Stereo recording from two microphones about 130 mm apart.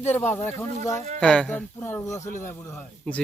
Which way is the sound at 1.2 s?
10° left (ahead or behind).